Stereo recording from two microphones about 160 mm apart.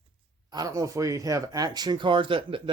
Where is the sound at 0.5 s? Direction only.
20° right (ahead or behind).